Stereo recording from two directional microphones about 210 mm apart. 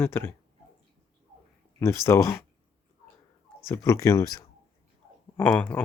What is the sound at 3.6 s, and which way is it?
Speech, 15° left (ahead or behind).